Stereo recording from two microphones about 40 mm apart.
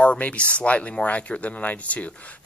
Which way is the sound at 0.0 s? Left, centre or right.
Left.